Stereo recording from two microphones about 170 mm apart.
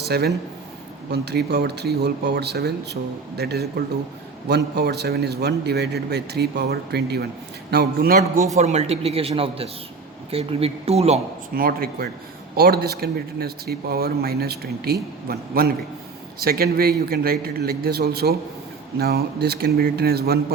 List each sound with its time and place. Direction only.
0.0 s a man's voice: 70° right (ahead or behind)
8.5 s speech: 40° right (ahead or behind)
11.5 s a man's voice: 60° right (ahead or behind)